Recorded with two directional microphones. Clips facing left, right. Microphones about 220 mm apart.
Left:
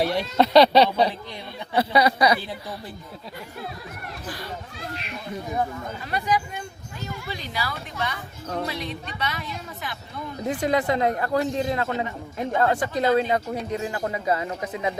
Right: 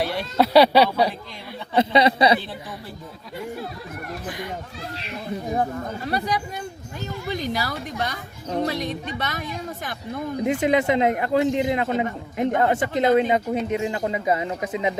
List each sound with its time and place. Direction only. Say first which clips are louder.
0.3 s speech: right 1 dB; 10° right (ahead or behind)
1.7 s speech: right 3 dB; 25° right (ahead or behind)
4.3 s speech: right 2 dB; 20° right (ahead or behind)
5.5 s a woman's voice: right 2 dB; 40° right (ahead or behind)
10.4 s speech: right 3 dB; 20° right (ahead or behind)